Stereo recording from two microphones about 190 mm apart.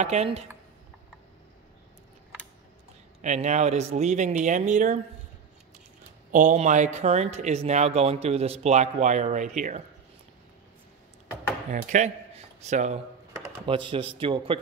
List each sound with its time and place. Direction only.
0.0 s speech: 35° right (ahead or behind)
3.2 s speech: 40° right (ahead or behind)
6.3 s speech: 40° right (ahead or behind)
11.7 s speech: 40° right (ahead or behind)
13.7 s speech: 25° right (ahead or behind)